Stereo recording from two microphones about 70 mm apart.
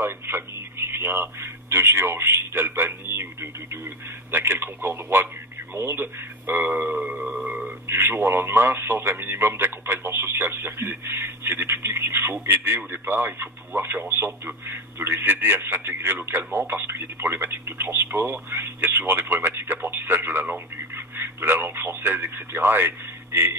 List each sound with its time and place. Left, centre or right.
0.0 s a man's voice: right
4.3 s a man's voice: right
7.3 s a sound: centre
7.9 s a man's voice: right